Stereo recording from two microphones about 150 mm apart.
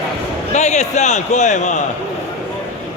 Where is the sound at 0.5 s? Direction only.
50° left (ahead or behind).